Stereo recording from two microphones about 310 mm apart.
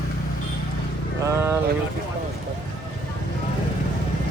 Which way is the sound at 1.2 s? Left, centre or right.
Centre.